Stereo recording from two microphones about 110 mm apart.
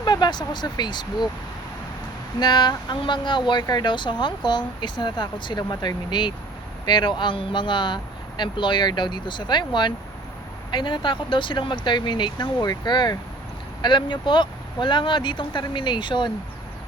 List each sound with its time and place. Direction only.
0.0 s speech: 40° left (ahead or behind)
2.4 s speech: 40° left (ahead or behind)